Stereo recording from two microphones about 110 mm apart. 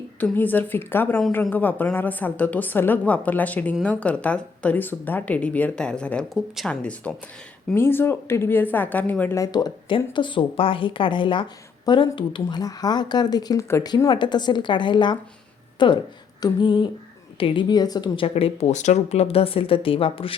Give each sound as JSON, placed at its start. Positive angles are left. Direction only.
{"t": 0.3, "sound": "a woman's voice", "side_deg": 15}
{"t": 9.3, "sound": "speech", "side_deg": 35}
{"t": 18.3, "sound": "speech", "side_deg": 65}